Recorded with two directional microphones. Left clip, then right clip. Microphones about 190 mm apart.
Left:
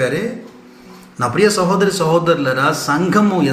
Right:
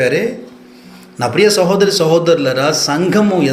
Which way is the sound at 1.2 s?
15° right (ahead or behind).